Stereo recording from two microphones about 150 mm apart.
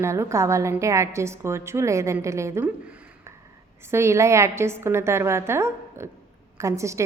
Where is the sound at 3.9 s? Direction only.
20° right (ahead or behind).